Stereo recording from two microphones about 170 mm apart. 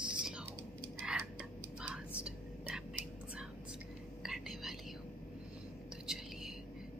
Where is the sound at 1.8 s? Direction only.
5° right (ahead or behind).